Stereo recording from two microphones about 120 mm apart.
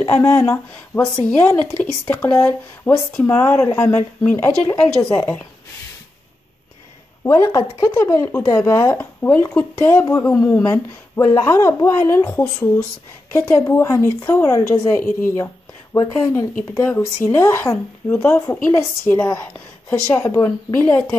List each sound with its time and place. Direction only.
0.0 s speech: 25° left (ahead or behind)
7.2 s speech: 25° left (ahead or behind)
13.3 s speech: 25° left (ahead or behind)